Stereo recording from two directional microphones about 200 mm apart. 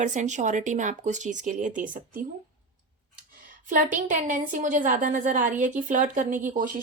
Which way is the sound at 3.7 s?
40° right (ahead or behind).